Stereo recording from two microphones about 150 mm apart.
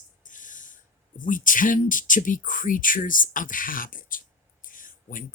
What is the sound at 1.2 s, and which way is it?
Speech, 60° left (ahead or behind).